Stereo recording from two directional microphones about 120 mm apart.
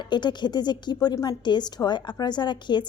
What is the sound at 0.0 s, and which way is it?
A woman's voice, 40° left (ahead or behind).